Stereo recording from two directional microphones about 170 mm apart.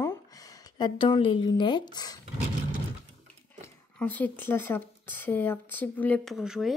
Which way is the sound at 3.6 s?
10° left (ahead or behind).